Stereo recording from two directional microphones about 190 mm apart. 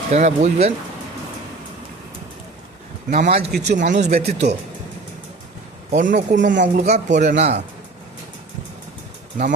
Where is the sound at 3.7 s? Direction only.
40° right (ahead or behind).